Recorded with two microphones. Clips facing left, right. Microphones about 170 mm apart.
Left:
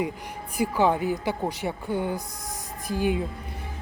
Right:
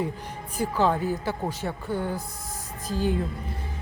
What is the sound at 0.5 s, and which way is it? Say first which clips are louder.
Speech: left 1 dB; 15° left (ahead or behind).